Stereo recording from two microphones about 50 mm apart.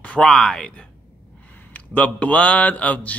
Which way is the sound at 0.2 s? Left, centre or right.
Centre.